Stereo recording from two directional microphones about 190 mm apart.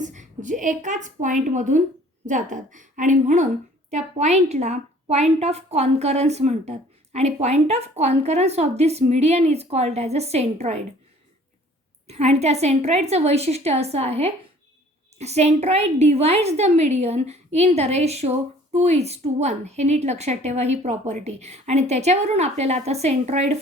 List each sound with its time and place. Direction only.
0.0 s a woman's voice: 40° right (ahead or behind)
12.0 s a woman's voice: 35° right (ahead or behind)